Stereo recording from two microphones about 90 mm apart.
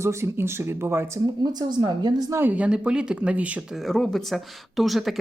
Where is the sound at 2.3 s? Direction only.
20° right (ahead or behind).